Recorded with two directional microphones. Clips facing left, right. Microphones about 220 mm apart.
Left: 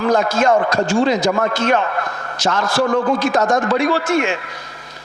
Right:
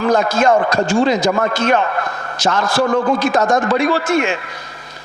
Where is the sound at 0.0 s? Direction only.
15° right (ahead or behind).